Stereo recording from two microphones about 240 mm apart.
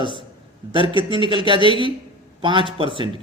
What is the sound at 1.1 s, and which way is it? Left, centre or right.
A man's voice, centre.